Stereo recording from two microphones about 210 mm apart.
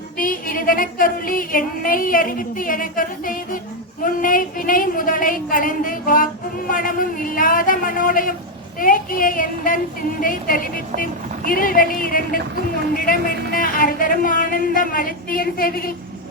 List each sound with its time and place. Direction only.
0.2 s music: 40° left (ahead or behind)
4.0 s a woman's voice: 40° left (ahead or behind)